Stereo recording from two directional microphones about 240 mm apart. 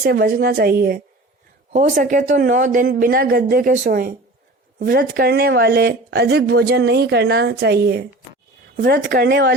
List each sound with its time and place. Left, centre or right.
0.0 s speech: right